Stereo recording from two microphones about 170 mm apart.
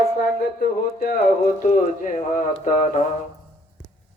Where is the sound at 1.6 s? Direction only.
50° left (ahead or behind).